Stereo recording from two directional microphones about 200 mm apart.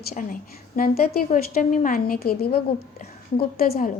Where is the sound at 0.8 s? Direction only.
50° left (ahead or behind).